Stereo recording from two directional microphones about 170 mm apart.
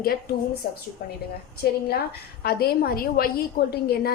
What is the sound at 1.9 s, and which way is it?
A woman's voice, 70° left (ahead or behind).